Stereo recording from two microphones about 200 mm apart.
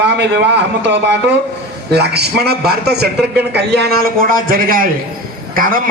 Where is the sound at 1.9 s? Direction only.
55° right (ahead or behind).